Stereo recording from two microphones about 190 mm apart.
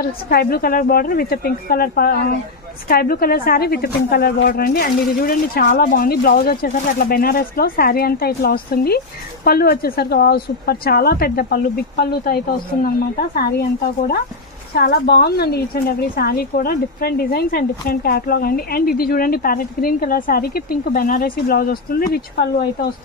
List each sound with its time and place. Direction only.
0.3 s a woman's voice: 55° left (ahead or behind)
14.8 s a woman's voice: 60° left (ahead or behind)